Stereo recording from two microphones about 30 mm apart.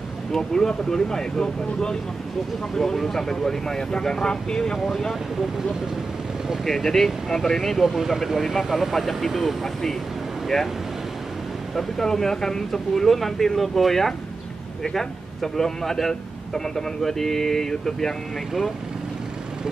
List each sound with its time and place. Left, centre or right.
0.3 s speech: centre
2.7 s a man's voice: centre
4.7 s speech: centre
6.6 s a man's voice: centre
9.6 s a man's voice: centre
11.7 s a man's voice: centre